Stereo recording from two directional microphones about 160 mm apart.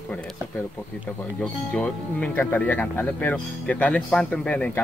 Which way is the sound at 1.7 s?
10° left (ahead or behind).